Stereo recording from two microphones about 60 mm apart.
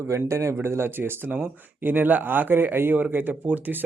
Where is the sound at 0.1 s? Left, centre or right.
Right.